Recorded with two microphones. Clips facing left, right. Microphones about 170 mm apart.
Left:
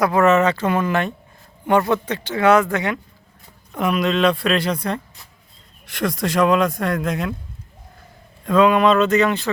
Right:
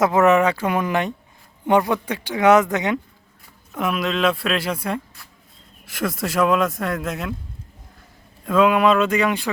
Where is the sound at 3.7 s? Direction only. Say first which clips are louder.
Left 3 dB; centre (ahead or behind).